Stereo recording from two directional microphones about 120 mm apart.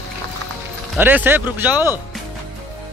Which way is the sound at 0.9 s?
15° right (ahead or behind).